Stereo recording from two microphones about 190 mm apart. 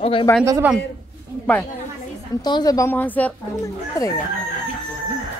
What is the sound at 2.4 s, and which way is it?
Speech, 20° left (ahead or behind).